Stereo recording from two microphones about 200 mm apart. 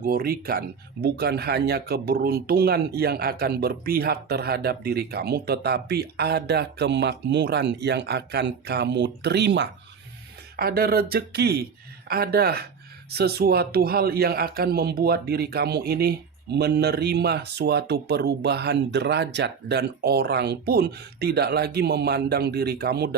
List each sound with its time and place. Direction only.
0.0 s a man's voice: 45° right (ahead or behind)
10.6 s a man's voice: 50° right (ahead or behind)